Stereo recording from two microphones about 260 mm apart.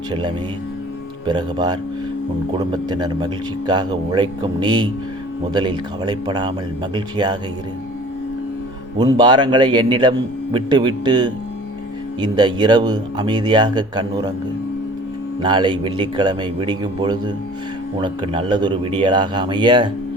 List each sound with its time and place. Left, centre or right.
0.1 s a man's voice: centre
9.0 s a man's voice: centre
15.4 s a man's voice: centre